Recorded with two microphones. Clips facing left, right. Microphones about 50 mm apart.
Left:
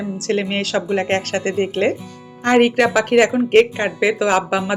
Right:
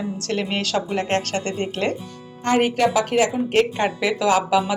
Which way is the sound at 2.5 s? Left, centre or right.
Left.